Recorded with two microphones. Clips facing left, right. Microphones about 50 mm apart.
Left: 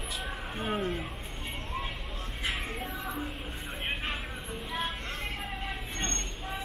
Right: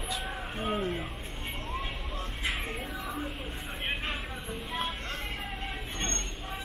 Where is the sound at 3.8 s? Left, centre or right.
Centre.